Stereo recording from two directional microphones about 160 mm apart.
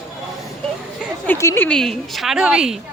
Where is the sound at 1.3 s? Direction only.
15° left (ahead or behind); by 2.7 s 5° right (ahead or behind).